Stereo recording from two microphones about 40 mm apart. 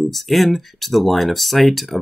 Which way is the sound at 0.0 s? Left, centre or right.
Centre.